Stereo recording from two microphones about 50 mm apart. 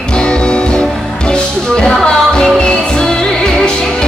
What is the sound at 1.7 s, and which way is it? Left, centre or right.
Music, centre.